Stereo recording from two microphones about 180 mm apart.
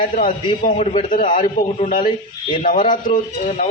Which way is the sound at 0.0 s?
50° left (ahead or behind).